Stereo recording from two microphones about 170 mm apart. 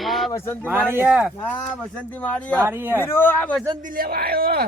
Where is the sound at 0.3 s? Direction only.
15° left (ahead or behind).